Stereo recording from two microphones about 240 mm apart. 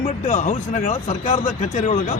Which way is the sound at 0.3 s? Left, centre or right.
Left.